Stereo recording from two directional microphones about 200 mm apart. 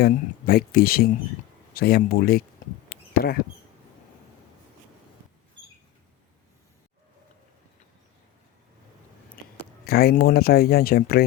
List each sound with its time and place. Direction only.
0.0 s speech: 50° left (ahead or behind)
2.9 s bee: 50° left (ahead or behind)
9.4 s a sound: 45° left (ahead or behind)
9.8 s speech: 50° left (ahead or behind)